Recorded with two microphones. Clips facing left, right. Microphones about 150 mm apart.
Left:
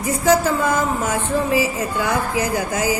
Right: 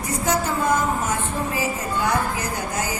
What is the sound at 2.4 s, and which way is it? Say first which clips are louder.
Speech: left 6 dB; 90° left.